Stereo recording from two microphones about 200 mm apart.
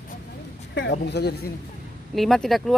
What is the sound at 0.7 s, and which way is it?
Speech, 60° left (ahead or behind).